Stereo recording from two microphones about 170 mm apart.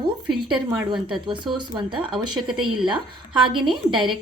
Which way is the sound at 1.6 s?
30° right (ahead or behind).